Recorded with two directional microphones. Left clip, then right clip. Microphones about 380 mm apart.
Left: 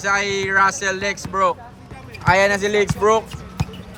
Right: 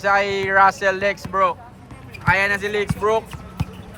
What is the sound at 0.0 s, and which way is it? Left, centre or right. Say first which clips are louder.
Speech: right 1 dB; centre.